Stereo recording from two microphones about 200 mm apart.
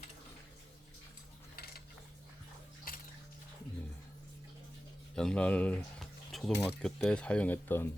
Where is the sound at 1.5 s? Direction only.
50° left (ahead or behind).